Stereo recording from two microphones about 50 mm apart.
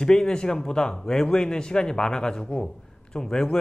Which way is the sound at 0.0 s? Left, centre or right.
Centre.